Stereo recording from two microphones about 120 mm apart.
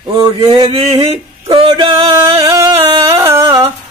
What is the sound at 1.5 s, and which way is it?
Music, 50° right (ahead or behind).